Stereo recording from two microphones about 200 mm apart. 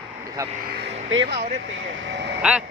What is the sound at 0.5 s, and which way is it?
Speech, 50° right (ahead or behind).